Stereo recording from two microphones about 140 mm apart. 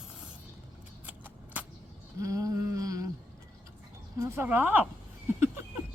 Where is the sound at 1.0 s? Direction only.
10° right (ahead or behind).